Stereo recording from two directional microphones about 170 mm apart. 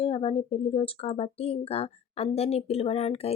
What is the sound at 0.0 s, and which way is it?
Speech, 35° left (ahead or behind).